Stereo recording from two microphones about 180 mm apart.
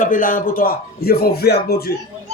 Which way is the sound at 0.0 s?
45° left (ahead or behind).